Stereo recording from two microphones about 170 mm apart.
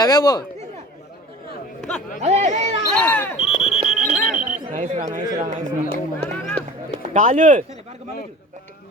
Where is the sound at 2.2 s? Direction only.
40° right (ahead or behind).